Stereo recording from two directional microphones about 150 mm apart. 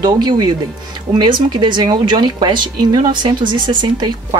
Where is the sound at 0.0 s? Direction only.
30° right (ahead or behind).